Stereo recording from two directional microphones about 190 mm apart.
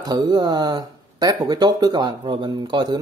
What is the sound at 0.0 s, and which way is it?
Speech, 20° right (ahead or behind).